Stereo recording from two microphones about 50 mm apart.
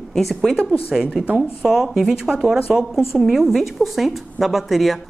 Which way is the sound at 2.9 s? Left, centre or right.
Centre.